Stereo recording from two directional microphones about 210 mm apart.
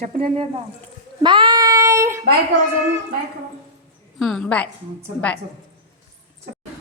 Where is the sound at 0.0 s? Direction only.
35° right (ahead or behind).